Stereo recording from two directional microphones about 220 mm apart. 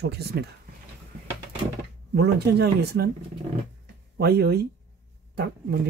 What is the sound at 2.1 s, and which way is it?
Speech, 50° right (ahead or behind).